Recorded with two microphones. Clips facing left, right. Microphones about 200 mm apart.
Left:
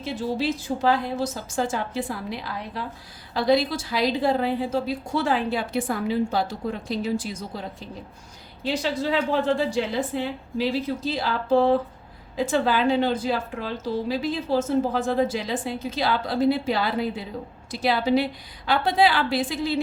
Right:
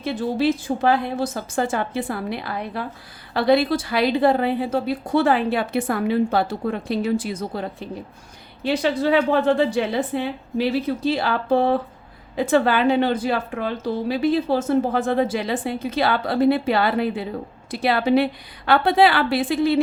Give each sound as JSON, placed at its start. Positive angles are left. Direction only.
{"t": 0.0, "sound": "a woman's voice", "side_deg": -55}